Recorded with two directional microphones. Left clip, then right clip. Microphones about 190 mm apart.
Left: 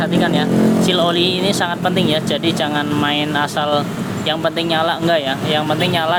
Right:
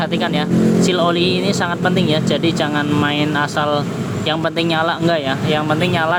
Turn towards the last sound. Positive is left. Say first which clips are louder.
# even
turn(degrees=-15)  # may be behind; listen again after turning